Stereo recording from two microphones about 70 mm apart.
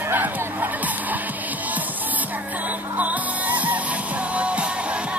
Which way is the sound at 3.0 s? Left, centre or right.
Right.